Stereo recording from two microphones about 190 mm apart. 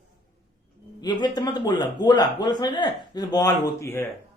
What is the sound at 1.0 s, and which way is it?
Speech, 20° left (ahead or behind).